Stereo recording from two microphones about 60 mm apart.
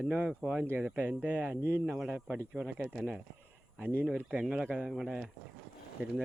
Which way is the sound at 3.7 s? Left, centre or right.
Right.